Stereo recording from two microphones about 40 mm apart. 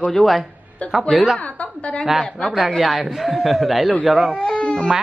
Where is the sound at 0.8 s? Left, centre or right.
Left.